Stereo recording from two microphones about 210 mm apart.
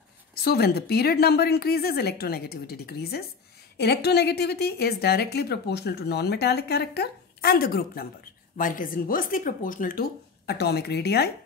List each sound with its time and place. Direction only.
0.3 s a woman's voice: 50° left (ahead or behind)